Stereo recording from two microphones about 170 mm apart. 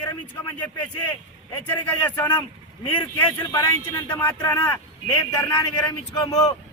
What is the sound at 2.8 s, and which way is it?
Speech, 30° left (ahead or behind).